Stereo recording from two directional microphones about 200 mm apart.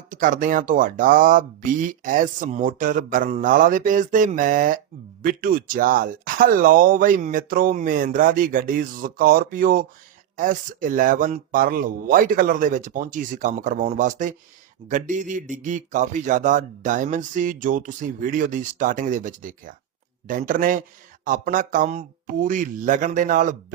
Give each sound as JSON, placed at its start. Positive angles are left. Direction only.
{"t": 0.1, "sound": "speech", "side_deg": -40}